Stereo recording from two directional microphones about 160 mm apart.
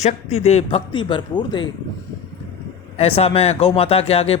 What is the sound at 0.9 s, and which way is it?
Speech, 30° left (ahead or behind).